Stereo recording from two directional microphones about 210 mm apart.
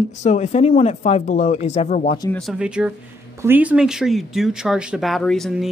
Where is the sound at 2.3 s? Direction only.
Centre (ahead or behind).